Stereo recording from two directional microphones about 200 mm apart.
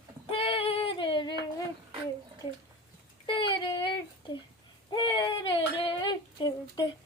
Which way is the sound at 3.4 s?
25° left (ahead or behind).